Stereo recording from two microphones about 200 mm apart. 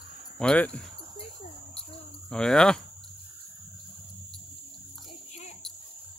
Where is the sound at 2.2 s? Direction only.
5° left (ahead or behind).